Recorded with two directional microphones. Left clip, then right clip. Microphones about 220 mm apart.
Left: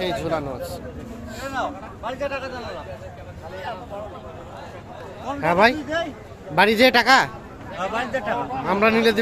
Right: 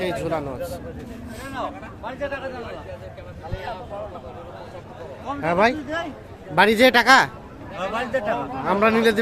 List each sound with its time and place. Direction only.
0.0 s a man's voice: centre (ahead or behind)
1.4 s speech: 50° left (ahead or behind)
5.4 s a man's voice: 5° left (ahead or behind)